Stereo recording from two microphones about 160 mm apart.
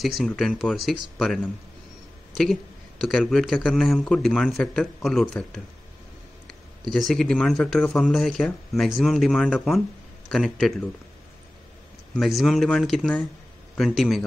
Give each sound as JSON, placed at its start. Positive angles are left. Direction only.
{"t": 0.2, "sound": "a man's voice", "side_deg": 0}
{"t": 6.9, "sound": "a man's voice", "side_deg": 0}
{"t": 12.2, "sound": "a man's voice", "side_deg": 0}